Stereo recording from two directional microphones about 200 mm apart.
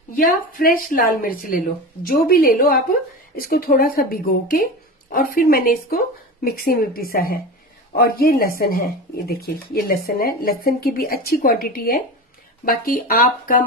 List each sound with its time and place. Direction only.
0.1 s speech: 45° left (ahead or behind)